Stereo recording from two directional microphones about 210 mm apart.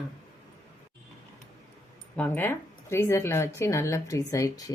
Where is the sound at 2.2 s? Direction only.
10° left (ahead or behind).